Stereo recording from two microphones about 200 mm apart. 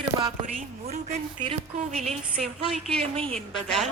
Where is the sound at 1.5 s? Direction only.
35° right (ahead or behind).